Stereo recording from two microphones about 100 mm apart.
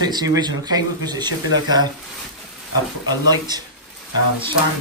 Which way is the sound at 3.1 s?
45° right (ahead or behind).